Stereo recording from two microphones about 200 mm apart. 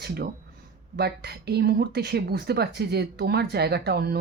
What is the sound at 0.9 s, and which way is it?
Speech, 55° right (ahead or behind).